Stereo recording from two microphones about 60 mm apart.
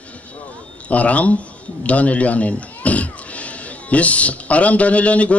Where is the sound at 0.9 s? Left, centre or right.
Left.